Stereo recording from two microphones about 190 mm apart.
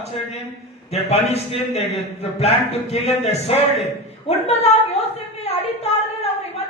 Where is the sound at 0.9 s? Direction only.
35° left (ahead or behind).